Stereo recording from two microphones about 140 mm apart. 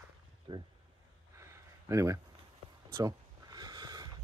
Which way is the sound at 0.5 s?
35° right (ahead or behind).